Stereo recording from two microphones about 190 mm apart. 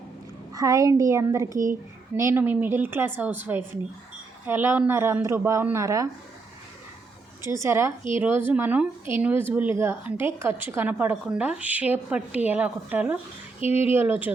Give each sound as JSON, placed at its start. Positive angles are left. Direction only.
{"t": 0.5, "sound": "speech", "side_deg": -20}
{"t": 7.4, "sound": "speech", "side_deg": -15}